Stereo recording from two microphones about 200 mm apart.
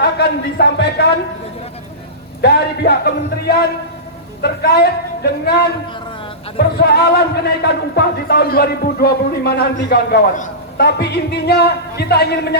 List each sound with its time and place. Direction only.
0.0 s a man's voice: 55° left (ahead or behind)
2.4 s speech: 55° left (ahead or behind)
10.3 s a sound: 40° left (ahead or behind)
10.8 s speech: 55° left (ahead or behind)